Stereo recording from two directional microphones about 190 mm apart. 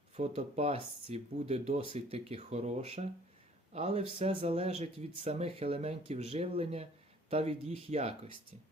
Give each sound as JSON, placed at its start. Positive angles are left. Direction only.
{"t": 0.2, "sound": "speech", "side_deg": -35}